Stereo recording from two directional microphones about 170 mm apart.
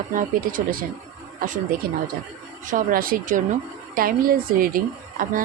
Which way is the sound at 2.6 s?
55° right (ahead or behind).